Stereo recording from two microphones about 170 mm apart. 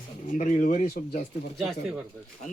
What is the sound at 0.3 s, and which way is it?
Speech, 50° left (ahead or behind).